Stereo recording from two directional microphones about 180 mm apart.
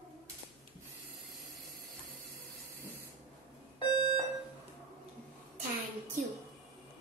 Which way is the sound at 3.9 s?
25° left (ahead or behind).